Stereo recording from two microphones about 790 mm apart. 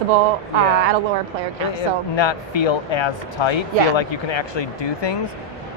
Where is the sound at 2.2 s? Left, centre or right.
Left.